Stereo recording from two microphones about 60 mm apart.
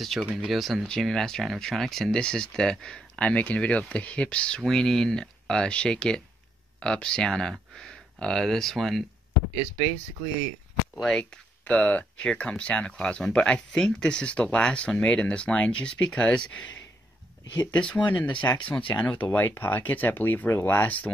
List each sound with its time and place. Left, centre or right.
0.0 s speech: centre
3.2 s speech: left; by 9.0 s centre
11.0 s speech: centre
11.6 s speech: left
17.7 s speech: left